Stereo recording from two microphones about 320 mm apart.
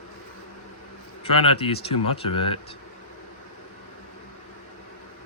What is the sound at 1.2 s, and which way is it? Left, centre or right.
Speech, centre.